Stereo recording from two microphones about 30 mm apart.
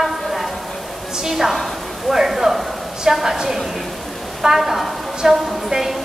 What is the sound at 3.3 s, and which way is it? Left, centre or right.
A woman's voice, centre.